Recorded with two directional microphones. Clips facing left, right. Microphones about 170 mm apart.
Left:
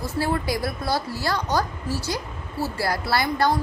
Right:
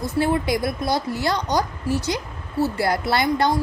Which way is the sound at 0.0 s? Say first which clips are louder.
Right 4 dB; 20° right (ahead or behind).